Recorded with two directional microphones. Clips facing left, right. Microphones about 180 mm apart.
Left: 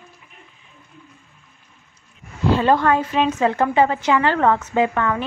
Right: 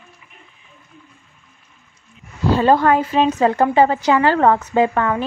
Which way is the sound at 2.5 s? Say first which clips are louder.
Right 3 dB; 35° right (ahead or behind).